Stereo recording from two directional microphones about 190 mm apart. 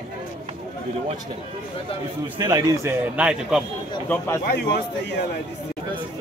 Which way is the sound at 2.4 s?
15° right (ahead or behind).